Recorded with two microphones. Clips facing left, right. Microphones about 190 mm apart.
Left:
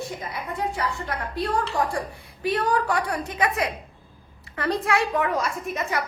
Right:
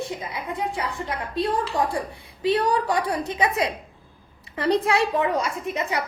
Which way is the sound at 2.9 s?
20° right (ahead or behind).